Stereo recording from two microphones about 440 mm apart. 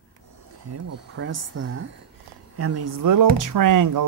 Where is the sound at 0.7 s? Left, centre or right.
Right.